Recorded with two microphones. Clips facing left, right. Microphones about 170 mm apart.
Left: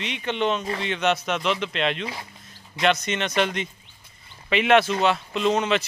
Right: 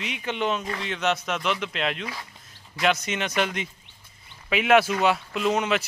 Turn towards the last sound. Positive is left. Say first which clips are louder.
# left 2 dB
turn(degrees=-5)  # may be behind; listen again after turning